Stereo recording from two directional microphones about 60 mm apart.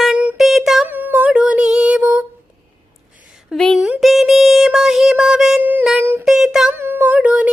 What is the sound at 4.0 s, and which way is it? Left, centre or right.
Music, centre.